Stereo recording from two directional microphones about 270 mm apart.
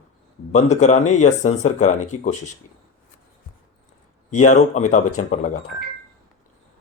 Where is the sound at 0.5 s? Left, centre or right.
Left.